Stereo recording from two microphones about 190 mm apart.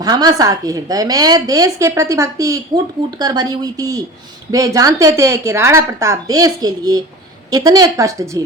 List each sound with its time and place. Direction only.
0.0 s a woman's voice: 20° right (ahead or behind)